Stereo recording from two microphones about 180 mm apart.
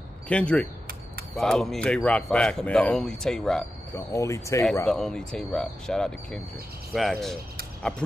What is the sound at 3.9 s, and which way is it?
Speech, 15° left (ahead or behind).